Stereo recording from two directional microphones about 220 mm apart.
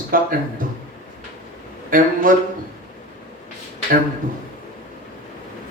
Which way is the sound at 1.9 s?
40° right (ahead or behind).